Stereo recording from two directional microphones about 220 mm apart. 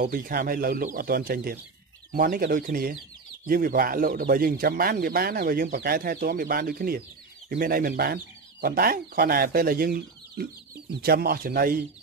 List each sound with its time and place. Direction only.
0.0 s speech: 40° right (ahead or behind)